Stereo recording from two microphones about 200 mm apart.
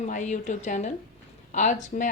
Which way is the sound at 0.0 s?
35° left (ahead or behind).